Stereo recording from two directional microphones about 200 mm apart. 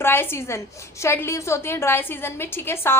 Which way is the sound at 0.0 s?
10° left (ahead or behind).